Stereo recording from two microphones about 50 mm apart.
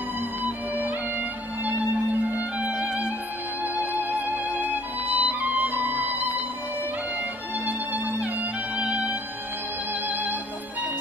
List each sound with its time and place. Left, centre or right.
0.4 s music: right
3.6 s music: right
7.6 s music: right